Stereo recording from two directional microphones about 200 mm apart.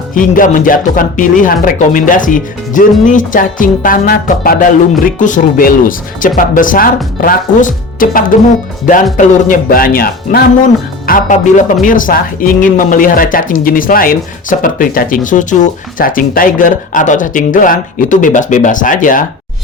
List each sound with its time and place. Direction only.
0.1 s speech: 40° left (ahead or behind)